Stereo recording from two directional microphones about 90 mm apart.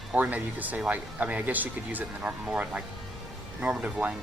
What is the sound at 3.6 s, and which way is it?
Speech, 10° right (ahead or behind).